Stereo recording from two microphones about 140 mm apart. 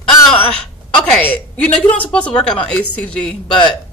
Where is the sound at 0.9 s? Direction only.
10° left (ahead or behind).